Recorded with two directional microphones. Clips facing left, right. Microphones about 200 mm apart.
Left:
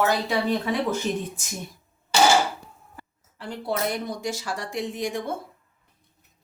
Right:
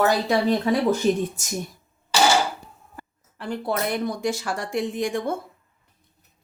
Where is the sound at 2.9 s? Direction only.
50° right (ahead or behind).